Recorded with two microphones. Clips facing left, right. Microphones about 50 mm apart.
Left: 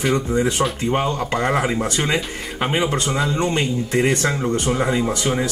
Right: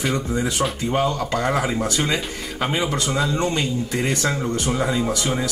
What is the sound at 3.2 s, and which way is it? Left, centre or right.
Speech, centre.